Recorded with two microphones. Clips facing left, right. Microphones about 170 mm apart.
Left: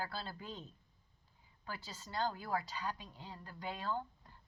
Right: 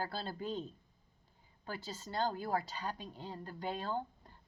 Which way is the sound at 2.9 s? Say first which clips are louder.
Right 2 dB; 50° right (ahead or behind).